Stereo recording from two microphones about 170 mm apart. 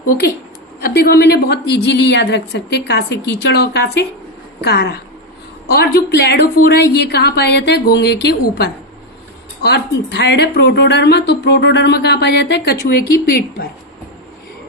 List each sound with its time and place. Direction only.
0.9 s a woman's voice: 70° left (ahead or behind)